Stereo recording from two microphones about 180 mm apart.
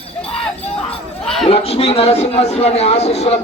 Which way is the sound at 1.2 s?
5° left (ahead or behind).